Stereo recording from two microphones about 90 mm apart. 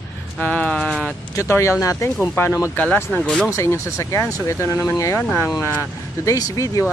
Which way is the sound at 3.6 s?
30° left (ahead or behind).